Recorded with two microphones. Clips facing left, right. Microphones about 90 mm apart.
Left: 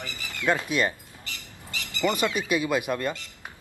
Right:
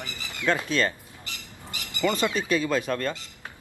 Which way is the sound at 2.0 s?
15° left (ahead or behind).